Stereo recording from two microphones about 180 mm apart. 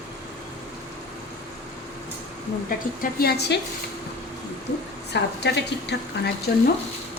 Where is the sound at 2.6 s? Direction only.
55° left (ahead or behind).